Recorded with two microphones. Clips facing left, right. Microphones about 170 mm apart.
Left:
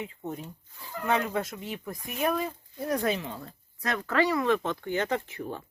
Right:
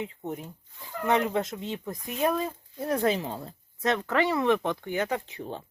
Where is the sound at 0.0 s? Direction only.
20° right (ahead or behind).